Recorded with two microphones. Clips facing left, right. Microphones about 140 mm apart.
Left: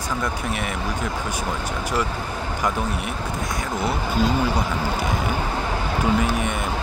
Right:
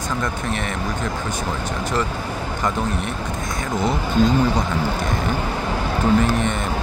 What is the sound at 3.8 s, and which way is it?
Speech, 5° left (ahead or behind).